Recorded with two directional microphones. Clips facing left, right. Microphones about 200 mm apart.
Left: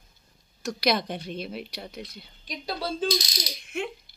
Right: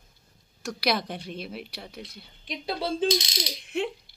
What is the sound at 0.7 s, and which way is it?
Speech, 5° right (ahead or behind).